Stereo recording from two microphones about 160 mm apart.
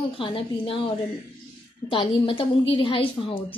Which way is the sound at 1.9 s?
30° left (ahead or behind).